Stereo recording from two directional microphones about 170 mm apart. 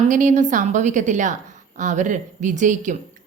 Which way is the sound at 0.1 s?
50° right (ahead or behind).